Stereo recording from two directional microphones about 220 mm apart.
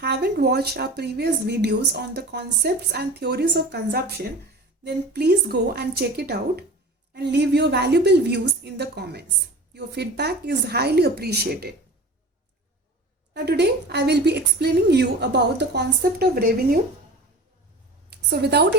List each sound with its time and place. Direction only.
0.0 s a woman's voice: 50° right (ahead or behind)
13.3 s a woman's voice: 50° right (ahead or behind)
18.1 s a woman's voice: 45° right (ahead or behind)